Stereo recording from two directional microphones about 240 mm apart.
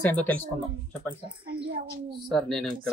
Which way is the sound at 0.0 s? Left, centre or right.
Centre.